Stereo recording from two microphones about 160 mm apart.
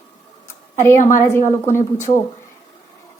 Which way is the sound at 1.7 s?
50° left (ahead or behind).